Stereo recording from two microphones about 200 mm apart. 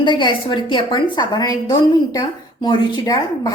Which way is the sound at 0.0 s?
25° left (ahead or behind).